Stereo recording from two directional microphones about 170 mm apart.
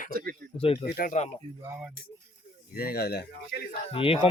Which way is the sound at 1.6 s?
15° right (ahead or behind).